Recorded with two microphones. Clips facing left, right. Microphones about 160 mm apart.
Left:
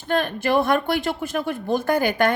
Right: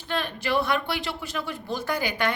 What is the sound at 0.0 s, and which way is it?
A woman's voice, 50° left (ahead or behind).